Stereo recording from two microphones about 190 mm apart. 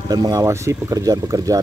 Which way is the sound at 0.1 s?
20° right (ahead or behind).